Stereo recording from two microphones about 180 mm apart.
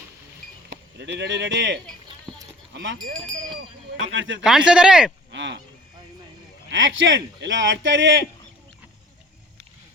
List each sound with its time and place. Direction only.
0.9 s speech: 75° right (ahead or behind); by 4.4 s 90° right
4.4 s speech: 5° right (ahead or behind)
5.3 s speech: 80° right
6.7 s speech: 90° right